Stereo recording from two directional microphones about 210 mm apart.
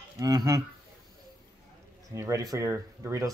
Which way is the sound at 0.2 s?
20° right (ahead or behind).